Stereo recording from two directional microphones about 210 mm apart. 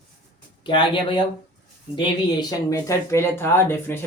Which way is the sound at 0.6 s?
20° left (ahead or behind).